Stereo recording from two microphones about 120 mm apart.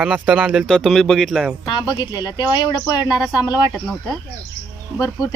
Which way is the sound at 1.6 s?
40° left (ahead or behind).